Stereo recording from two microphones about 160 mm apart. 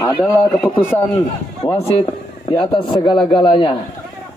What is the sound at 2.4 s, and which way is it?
A man's voice, 30° left (ahead or behind).